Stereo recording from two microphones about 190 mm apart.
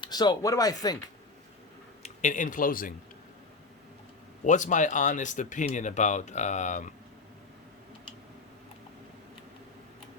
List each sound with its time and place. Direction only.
0.0 s speech: 20° left (ahead or behind)
2.0 s speech: 40° left (ahead or behind)
4.4 s speech: 40° left (ahead or behind)